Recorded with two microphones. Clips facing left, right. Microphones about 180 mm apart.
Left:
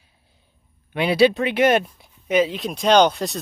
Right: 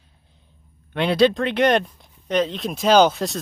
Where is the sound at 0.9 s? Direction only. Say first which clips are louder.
Left 1 dB; 5° left (ahead or behind).